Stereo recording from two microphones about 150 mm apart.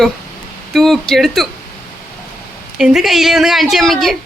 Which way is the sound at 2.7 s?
5° right (ahead or behind).